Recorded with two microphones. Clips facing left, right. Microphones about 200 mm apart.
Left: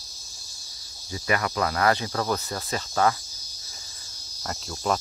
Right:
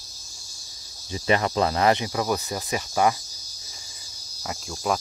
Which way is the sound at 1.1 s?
25° right (ahead or behind).